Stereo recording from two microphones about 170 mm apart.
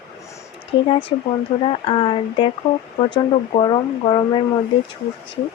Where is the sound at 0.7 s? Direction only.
30° left (ahead or behind).